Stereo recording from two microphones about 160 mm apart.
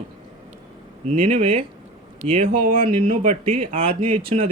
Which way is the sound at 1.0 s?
40° right (ahead or behind).